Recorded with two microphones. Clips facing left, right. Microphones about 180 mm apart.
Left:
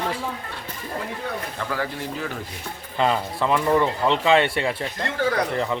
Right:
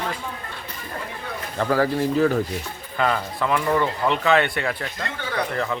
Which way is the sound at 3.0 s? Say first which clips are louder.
Left 1 dB; 25° left (ahead or behind).